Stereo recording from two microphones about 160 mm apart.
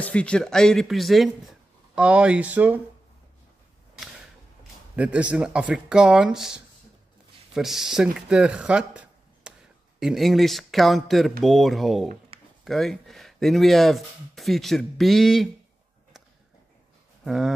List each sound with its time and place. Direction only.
0.0 s speech: 5° left (ahead or behind); by 2.8 s 10° right (ahead or behind)
4.9 s speech: 10° right (ahead or behind)
12.3 s a sound: 35° right (ahead or behind)
12.6 s speech: centre (ahead or behind)
17.2 s speech: 5° right (ahead or behind)